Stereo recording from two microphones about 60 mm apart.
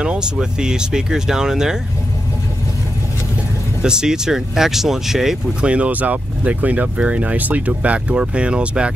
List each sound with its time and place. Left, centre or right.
0.0 s speech: centre
3.8 s speech: centre
5.6 s speech: right